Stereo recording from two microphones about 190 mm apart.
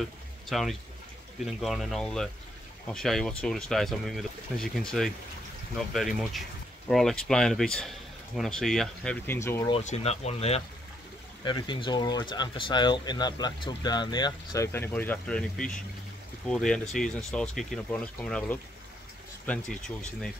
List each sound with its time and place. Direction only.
0.5 s speech: centre (ahead or behind)
9.7 s speech: 35° left (ahead or behind); by 20.3 s 5° left (ahead or behind)